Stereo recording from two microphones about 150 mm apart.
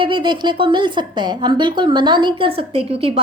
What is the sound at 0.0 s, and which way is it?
Speech, 30° right (ahead or behind).